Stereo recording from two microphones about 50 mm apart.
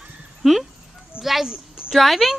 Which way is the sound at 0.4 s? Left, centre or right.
Centre.